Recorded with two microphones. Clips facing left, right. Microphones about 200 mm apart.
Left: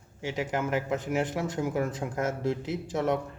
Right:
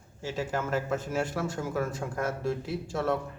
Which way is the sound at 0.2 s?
15° left (ahead or behind).